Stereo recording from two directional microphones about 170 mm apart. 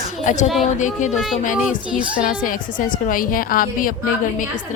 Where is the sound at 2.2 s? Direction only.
50° left (ahead or behind).